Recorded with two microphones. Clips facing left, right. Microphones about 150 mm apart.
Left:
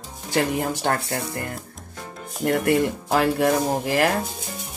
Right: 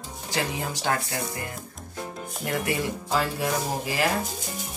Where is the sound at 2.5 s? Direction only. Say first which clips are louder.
Left 8 dB; 50° left (ahead or behind).